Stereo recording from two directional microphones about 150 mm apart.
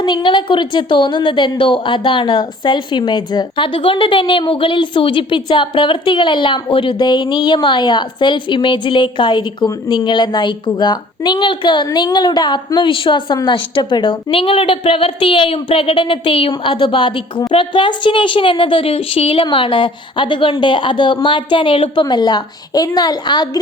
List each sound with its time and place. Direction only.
0.0 s a woman's voice: 30° left (ahead or behind)